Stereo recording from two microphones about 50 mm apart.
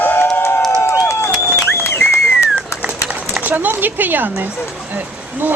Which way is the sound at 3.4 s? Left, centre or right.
Right.